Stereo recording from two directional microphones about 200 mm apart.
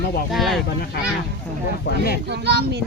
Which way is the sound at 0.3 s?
Centre (ahead or behind).